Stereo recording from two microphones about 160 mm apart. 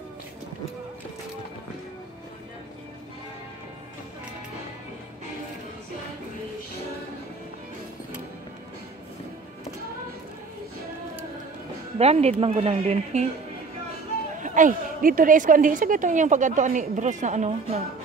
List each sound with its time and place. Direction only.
12.0 s speech: 40° right (ahead or behind)
14.4 s a woman's voice: 55° right (ahead or behind)